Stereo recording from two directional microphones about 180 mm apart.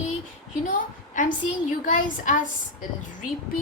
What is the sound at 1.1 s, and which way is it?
A woman's voice, 45° left (ahead or behind).